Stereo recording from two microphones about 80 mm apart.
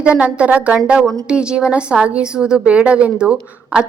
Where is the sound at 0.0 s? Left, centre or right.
Centre.